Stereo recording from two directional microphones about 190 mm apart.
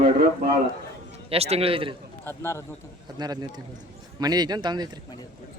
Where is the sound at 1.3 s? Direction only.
35° right (ahead or behind).